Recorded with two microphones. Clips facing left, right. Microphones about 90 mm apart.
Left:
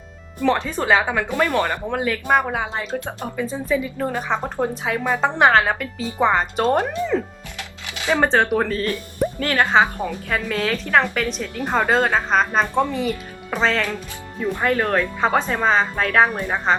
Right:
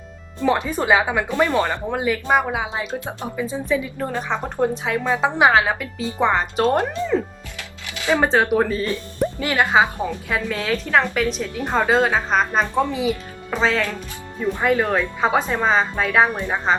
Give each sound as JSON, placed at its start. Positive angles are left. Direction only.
{"t": 0.3, "sound": "speech", "side_deg": -15}
{"t": 2.3, "sound": "a woman's voice", "side_deg": -5}
{"t": 2.9, "sound": "speech", "side_deg": -20}
{"t": 3.2, "sound": "a woman's voice", "side_deg": -5}
{"t": 8.2, "sound": "a woman's voice", "side_deg": -5}